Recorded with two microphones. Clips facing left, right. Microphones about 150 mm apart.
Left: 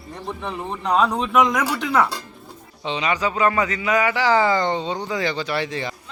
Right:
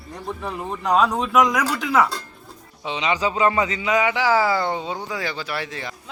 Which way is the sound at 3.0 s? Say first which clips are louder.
Right 1 dB; 25° right (ahead or behind).